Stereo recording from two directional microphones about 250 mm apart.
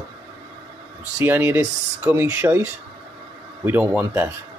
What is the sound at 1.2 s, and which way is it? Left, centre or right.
Speech, centre.